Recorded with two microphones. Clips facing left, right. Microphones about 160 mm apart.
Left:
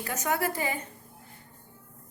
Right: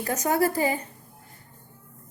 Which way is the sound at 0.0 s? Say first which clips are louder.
Right 6 dB; 40° right (ahead or behind).